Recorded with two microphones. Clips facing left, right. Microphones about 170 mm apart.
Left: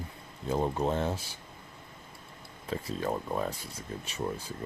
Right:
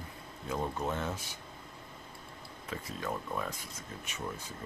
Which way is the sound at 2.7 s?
30° left (ahead or behind).